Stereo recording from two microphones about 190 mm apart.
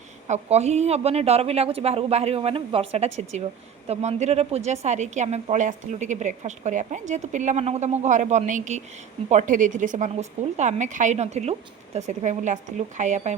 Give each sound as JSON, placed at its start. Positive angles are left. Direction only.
{"t": 0.3, "sound": "a woman's voice", "side_deg": -35}